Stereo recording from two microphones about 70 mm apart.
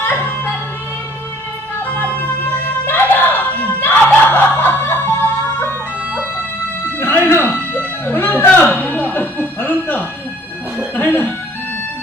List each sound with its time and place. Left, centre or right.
0.0 s music: left
1.8 s music: centre
6.8 s music: left